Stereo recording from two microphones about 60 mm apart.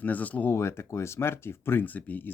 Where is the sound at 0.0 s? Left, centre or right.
Left.